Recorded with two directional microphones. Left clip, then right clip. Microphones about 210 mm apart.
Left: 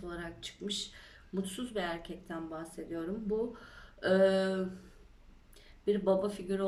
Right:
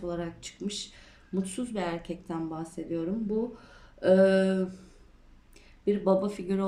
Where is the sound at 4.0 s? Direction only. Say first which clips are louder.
Right 5 dB; 30° right (ahead or behind).